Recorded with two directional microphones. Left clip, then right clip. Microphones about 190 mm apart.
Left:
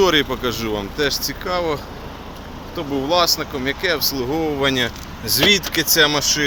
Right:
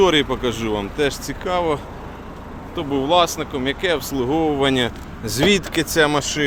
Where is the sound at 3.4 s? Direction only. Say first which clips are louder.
Even; 10° right (ahead or behind).